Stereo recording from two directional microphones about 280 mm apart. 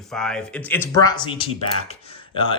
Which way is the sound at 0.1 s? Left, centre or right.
Centre.